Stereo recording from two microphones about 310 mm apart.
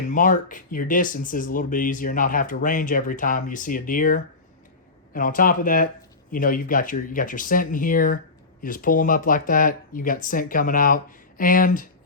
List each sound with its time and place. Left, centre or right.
0.1 s speech: left